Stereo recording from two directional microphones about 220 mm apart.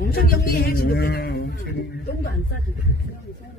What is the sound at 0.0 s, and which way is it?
A man's voice, 45° left (ahead or behind).